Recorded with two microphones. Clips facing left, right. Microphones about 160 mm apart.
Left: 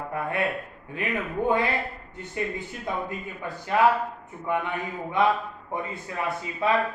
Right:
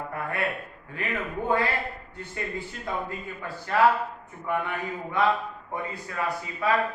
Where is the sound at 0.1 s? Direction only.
20° left (ahead or behind).